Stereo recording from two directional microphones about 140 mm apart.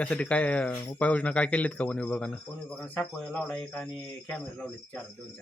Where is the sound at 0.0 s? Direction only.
10° left (ahead or behind).